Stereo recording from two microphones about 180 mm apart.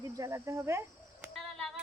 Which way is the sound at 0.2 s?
15° right (ahead or behind).